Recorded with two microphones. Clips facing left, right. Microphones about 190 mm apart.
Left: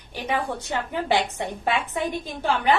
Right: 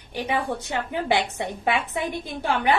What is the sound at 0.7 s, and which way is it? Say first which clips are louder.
A woman's voice: even; 15° right (ahead or behind).